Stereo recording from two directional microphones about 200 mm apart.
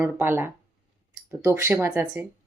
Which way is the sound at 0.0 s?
10° right (ahead or behind).